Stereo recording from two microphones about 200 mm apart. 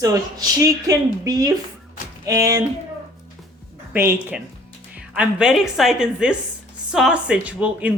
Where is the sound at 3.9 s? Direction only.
10° right (ahead or behind).